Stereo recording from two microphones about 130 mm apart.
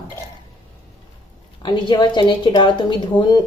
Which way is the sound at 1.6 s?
35° left (ahead or behind).